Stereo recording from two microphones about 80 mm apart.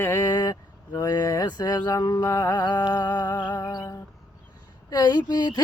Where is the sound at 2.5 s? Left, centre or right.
Left.